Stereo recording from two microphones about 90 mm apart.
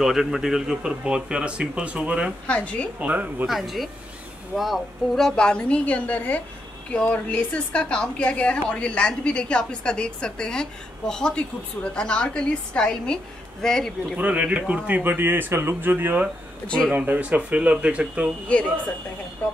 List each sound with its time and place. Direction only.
0.0 s a man's voice: 5° right (ahead or behind)
2.4 s a woman's voice: 15° left (ahead or behind)
3.0 s a man's voice: 20° right (ahead or behind)
3.4 s a woman's voice: centre (ahead or behind)
14.1 s a man's voice: 15° right (ahead or behind)
16.6 s a woman's voice: 10° left (ahead or behind)
16.9 s a man's voice: 20° right (ahead or behind)